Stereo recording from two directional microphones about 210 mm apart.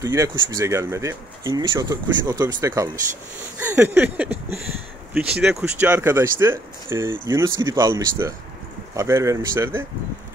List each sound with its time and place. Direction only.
0.0 s speech: 15° right (ahead or behind)